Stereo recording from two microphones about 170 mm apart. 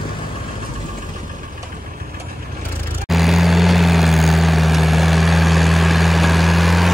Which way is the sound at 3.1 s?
Centre (ahead or behind).